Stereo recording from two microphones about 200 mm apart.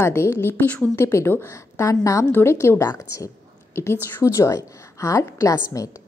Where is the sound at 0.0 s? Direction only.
10° left (ahead or behind).